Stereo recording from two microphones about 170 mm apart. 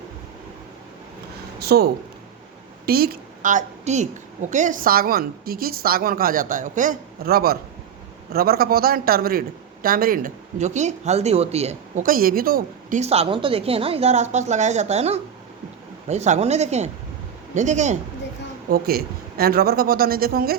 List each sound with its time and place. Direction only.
1.5 s a woman's voice: 70° right (ahead or behind); by 12.0 s 40° right (ahead or behind)
12.0 s a woman's voice: 60° right (ahead or behind)
13.0 s a man's voice: 35° right (ahead or behind)
18.7 s a woman's voice: 60° right (ahead or behind)